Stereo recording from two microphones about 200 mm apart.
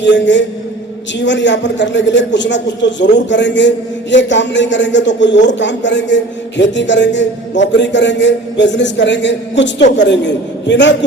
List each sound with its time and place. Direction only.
0.0 s a man's voice: 60° left (ahead or behind)